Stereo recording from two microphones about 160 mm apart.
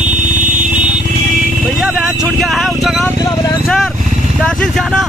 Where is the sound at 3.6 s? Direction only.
Centre (ahead or behind).